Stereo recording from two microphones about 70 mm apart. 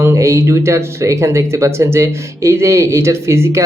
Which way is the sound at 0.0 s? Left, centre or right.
Right.